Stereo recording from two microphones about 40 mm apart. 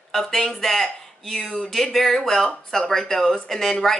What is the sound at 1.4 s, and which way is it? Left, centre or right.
Speech, centre.